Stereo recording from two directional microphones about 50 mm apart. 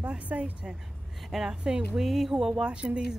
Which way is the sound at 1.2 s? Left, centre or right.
Centre.